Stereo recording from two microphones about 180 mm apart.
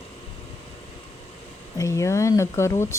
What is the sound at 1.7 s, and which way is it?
Speech, 15° left (ahead or behind).